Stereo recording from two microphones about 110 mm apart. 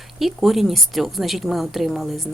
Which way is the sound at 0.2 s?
Centre (ahead or behind).